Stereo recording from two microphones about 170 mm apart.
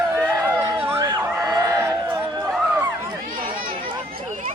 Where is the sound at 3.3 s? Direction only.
30° right (ahead or behind).